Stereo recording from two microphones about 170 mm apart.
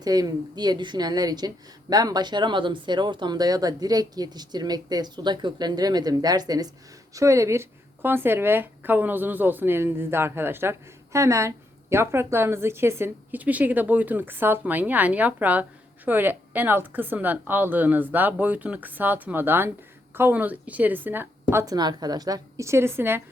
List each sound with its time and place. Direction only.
0.0 s a woman's voice: 20° right (ahead or behind)